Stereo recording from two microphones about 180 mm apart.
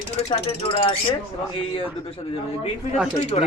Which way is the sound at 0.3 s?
30° left (ahead or behind).